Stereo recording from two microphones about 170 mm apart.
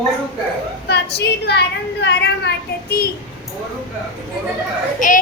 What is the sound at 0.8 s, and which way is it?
A woman's voice, 75° left (ahead or behind).